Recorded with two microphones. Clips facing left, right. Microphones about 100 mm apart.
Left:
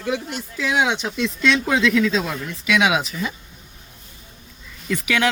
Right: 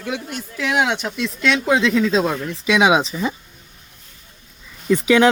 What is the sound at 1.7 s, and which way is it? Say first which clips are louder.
Speech: right 5 dB; 25° right (ahead or behind).